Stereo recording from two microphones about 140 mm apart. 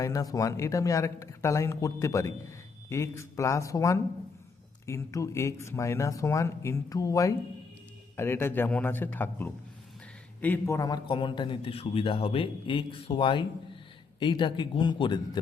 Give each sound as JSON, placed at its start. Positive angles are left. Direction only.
{"t": 0.0, "sound": "a man's voice", "side_deg": 25}
{"t": 10.8, "sound": "a man's voice", "side_deg": 30}